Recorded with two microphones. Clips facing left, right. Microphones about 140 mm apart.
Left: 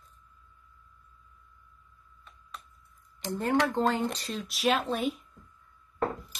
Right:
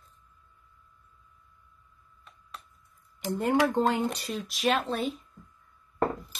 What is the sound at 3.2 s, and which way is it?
Speech, 10° right (ahead or behind).